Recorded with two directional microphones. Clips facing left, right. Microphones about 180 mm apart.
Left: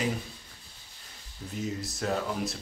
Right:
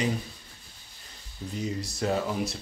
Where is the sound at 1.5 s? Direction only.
Centre (ahead or behind).